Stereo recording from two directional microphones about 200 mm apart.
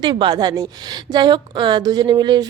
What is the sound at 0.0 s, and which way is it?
Speech, 20° right (ahead or behind).